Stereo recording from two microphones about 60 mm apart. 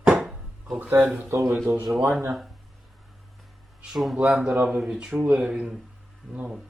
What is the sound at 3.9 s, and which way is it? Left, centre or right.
Speech, centre.